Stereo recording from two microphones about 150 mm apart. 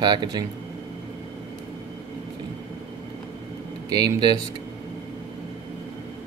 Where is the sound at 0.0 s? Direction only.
30° right (ahead or behind).